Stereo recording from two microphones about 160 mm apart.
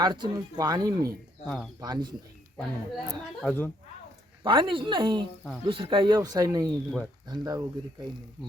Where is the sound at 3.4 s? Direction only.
10° left (ahead or behind).